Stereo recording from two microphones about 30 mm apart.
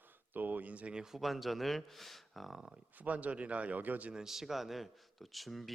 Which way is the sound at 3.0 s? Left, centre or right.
Right.